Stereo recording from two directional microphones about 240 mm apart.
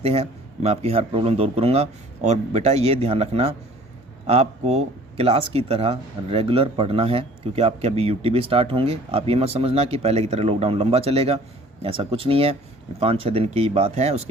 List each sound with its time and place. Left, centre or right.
0.0 s speech: right